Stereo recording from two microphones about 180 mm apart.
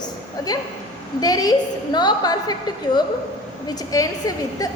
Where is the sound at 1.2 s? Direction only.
20° left (ahead or behind).